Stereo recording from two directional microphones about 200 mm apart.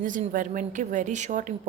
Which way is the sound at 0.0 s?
40° right (ahead or behind).